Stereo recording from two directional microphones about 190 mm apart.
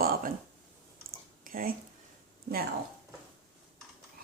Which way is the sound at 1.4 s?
50° right (ahead or behind).